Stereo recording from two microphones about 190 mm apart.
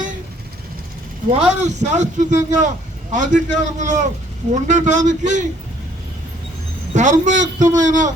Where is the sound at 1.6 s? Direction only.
40° right (ahead or behind).